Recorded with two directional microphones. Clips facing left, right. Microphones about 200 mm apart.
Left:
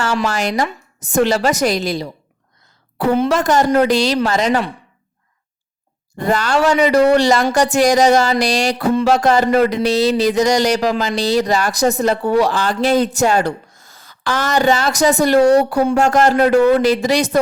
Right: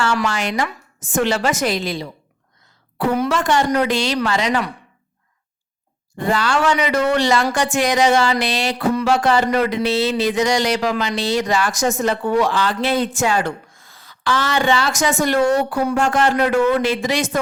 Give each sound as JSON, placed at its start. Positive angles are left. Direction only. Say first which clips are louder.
{"t": 0.3, "sound": "speech", "louder": "left 3 dB", "side_deg": 40}
{"t": 3.2, "sound": "speech", "louder": "left 3 dB", "side_deg": 40}
{"t": 6.1, "sound": "speech", "louder": "left 3 dB", "side_deg": 40}